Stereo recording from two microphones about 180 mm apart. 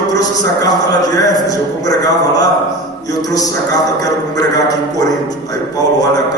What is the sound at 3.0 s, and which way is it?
A man's voice, 20° left (ahead or behind).